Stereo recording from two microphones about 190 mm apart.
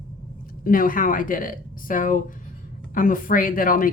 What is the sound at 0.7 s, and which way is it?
Speech, 45° left (ahead or behind).